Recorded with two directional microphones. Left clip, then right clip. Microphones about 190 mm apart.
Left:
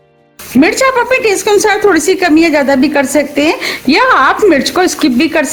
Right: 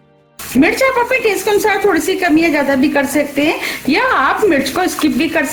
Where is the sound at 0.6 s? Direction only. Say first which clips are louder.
Left 3 dB; 55° left (ahead or behind).